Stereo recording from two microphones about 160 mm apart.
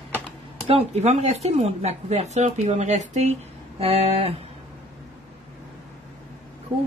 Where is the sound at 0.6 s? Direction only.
40° right (ahead or behind).